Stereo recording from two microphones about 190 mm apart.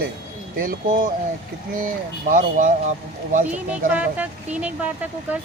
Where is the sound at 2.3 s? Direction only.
45° right (ahead or behind).